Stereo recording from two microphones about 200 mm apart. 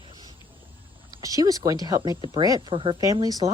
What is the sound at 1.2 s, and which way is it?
Speech, 15° right (ahead or behind).